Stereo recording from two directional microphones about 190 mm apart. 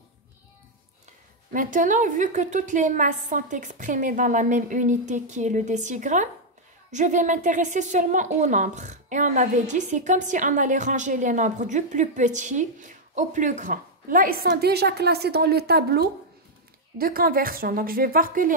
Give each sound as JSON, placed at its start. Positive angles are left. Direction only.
{"t": 1.5, "sound": "a woman's voice", "side_deg": -45}